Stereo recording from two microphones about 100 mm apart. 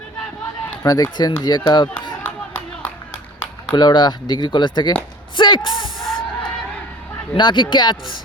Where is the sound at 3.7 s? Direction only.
45° left (ahead or behind).